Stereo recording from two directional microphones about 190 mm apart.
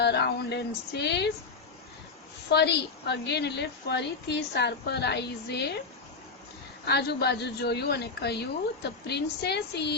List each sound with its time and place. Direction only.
0.0 s a woman's voice: 60° left (ahead or behind)
2.5 s a woman's voice: 60° left (ahead or behind)
6.8 s a woman's voice: 60° left (ahead or behind)